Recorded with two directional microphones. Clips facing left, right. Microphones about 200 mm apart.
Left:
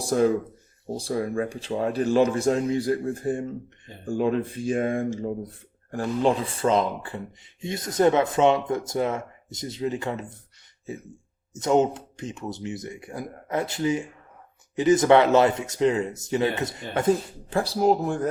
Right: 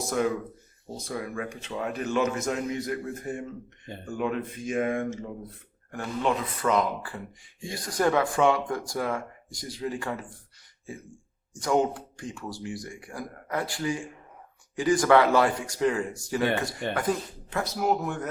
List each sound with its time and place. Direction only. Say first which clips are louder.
0.0 s speech: left 5 dB; 30° left (ahead or behind)
11.5 s speech: left 4 dB; 25° left (ahead or behind)